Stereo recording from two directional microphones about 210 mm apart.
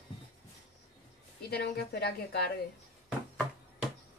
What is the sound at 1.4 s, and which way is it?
A woman's voice, 50° left (ahead or behind).